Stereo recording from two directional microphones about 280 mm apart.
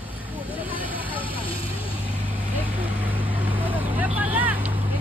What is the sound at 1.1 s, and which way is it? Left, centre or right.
Vehicle, centre.